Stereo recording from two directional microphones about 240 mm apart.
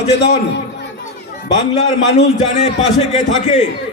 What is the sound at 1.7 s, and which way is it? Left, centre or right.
A man's voice, left.